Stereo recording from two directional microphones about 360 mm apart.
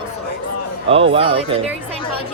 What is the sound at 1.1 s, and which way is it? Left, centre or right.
Speech, centre.